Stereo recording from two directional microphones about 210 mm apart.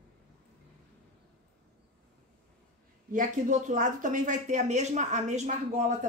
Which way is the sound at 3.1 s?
40° right (ahead or behind).